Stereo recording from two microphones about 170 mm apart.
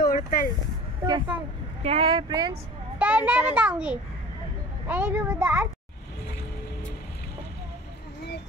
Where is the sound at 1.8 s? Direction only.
35° right (ahead or behind).